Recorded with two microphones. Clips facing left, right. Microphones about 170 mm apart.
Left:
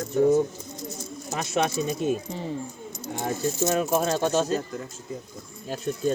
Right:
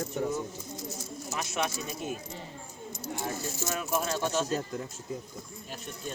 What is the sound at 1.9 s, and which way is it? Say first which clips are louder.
Speech: left 10 dB; 25° left (ahead or behind).